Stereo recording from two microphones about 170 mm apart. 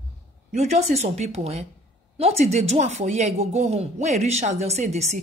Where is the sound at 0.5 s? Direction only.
40° right (ahead or behind).